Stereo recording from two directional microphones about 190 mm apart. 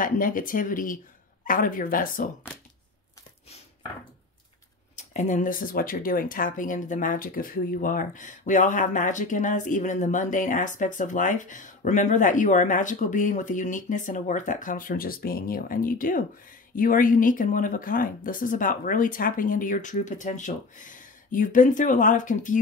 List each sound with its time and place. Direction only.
0.0 s speech: 45° left (ahead or behind)
4.9 s speech: 40° left (ahead or behind)